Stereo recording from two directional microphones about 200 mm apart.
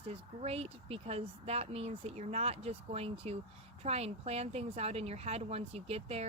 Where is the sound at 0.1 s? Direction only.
30° right (ahead or behind).